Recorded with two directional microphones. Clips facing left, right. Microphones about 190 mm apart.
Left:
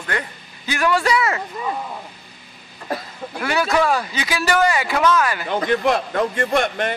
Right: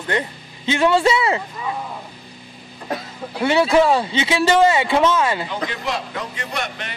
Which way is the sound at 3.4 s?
25° right (ahead or behind).